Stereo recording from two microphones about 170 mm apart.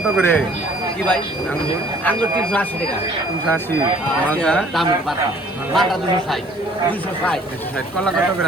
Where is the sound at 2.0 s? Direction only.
10° left (ahead or behind).